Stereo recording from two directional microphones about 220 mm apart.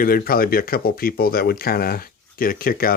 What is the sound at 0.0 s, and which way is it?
Speech, 40° left (ahead or behind).